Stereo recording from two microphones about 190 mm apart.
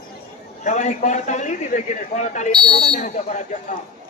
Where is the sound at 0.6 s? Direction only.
40° left (ahead or behind).